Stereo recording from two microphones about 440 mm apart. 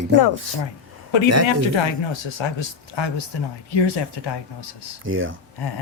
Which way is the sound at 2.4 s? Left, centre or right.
Left.